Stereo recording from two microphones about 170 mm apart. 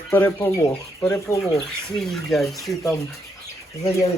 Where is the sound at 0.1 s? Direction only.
10° left (ahead or behind).